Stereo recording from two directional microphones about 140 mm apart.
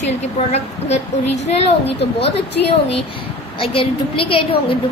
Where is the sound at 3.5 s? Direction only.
40° left (ahead or behind).